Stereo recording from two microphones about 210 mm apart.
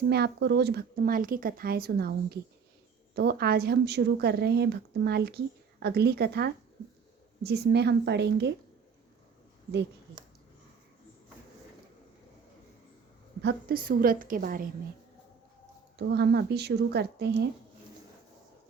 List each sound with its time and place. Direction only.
0.1 s speech: 50° right (ahead or behind)
13.4 s speech: 50° right (ahead or behind)
16.0 s speech: 50° right (ahead or behind)